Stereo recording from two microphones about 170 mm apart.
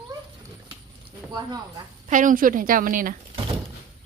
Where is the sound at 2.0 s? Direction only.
50° right (ahead or behind).